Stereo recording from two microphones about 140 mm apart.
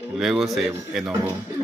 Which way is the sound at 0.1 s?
Centre (ahead or behind).